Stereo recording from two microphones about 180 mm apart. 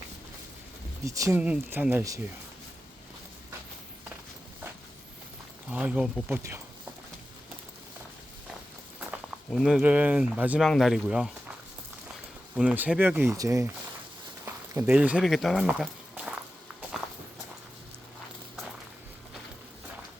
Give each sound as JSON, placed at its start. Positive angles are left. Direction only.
{"t": 1.0, "sound": "speech", "side_deg": -15}
{"t": 5.7, "sound": "speech", "side_deg": -5}
{"t": 9.5, "sound": "speech", "side_deg": 0}
{"t": 12.5, "sound": "speech", "side_deg": -10}